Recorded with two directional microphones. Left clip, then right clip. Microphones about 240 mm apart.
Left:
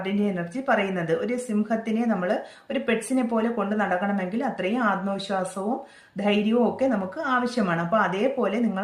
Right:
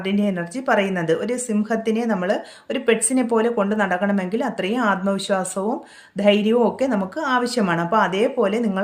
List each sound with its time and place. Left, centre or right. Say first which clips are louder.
0.0 s a woman's voice: right 4 dB; right